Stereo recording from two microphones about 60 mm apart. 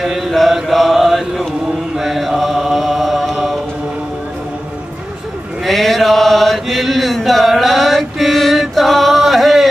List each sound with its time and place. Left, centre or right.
0.0 s chant: centre
2.0 s mantra: centre
5.6 s chant: centre